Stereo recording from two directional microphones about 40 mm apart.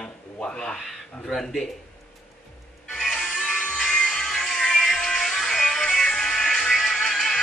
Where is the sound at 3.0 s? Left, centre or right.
Centre.